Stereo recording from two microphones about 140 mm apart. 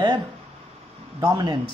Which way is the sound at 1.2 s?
30° right (ahead or behind).